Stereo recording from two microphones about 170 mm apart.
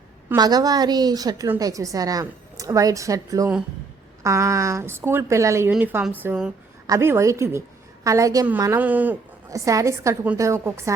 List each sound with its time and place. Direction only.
0.3 s a woman's voice: 25° right (ahead or behind)
8.8 s a woman's voice: 10° right (ahead or behind)